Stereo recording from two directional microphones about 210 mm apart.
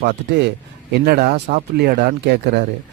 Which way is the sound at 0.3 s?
55° right (ahead or behind).